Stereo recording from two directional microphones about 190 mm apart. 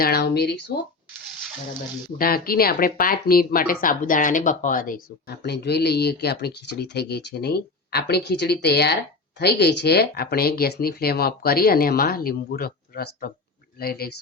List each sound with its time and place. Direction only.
0.0 s speech: 55° left (ahead or behind)
2.1 s speech: 50° left (ahead or behind)